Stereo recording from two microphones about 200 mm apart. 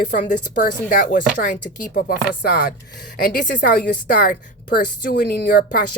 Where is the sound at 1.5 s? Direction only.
55° left (ahead or behind).